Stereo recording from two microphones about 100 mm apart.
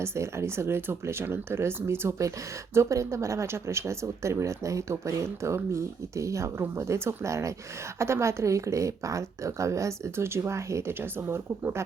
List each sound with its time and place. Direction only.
0.0 s speech: 25° right (ahead or behind)